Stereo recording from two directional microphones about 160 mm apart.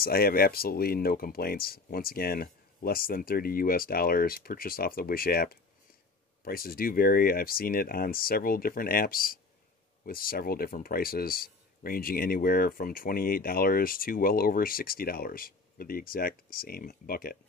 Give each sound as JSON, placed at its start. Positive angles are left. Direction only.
{"t": 0.0, "sound": "speech", "side_deg": 70}